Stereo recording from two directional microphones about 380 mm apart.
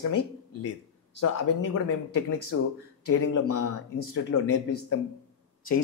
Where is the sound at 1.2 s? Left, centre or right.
Left.